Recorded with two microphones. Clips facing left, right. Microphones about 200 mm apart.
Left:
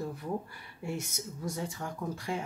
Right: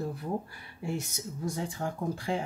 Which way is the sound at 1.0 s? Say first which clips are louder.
Right 2 dB; 35° right (ahead or behind).